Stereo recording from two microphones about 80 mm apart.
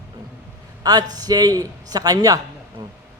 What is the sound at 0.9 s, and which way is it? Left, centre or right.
A man's voice, right.